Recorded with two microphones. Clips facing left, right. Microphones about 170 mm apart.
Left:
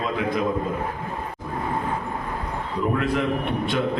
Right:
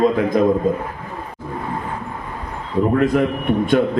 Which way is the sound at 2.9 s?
45° right (ahead or behind).